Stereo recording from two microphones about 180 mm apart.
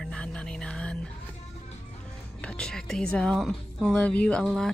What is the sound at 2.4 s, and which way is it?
Speech, 5° left (ahead or behind).